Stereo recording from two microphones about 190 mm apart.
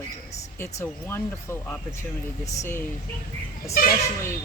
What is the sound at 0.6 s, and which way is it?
Speech, 10° left (ahead or behind).